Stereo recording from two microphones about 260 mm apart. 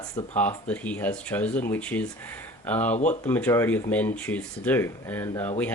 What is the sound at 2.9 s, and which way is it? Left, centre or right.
Speech, left.